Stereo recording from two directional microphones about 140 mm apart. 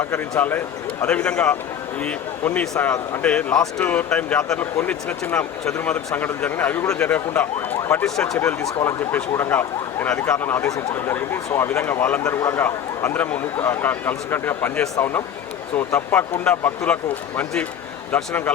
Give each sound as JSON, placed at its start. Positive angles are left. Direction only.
{"t": 0.0, "sound": "speech", "side_deg": 10}
{"t": 8.0, "sound": "speech", "side_deg": 5}